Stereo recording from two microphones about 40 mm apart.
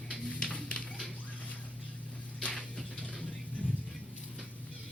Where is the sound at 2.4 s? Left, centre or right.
Left.